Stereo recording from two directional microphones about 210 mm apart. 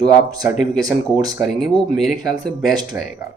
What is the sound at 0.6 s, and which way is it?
Speech, centre (ahead or behind).